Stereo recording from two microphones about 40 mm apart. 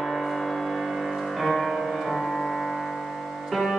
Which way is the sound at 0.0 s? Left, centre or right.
Centre.